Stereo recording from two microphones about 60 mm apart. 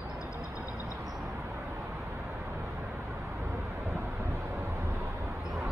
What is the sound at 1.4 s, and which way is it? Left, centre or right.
Vehicle, right.